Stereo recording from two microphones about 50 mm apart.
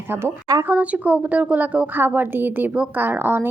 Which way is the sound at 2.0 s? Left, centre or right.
Right.